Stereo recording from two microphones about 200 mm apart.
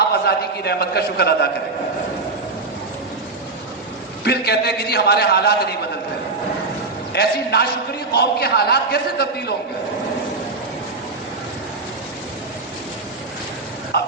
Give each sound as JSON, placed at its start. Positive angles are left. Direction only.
{"t": 0.3, "sound": "a man's voice", "side_deg": 55}
{"t": 4.2, "sound": "a man's voice", "side_deg": 55}
{"t": 7.1, "sound": "a man's voice", "side_deg": 55}
{"t": 13.9, "sound": "speech", "side_deg": 55}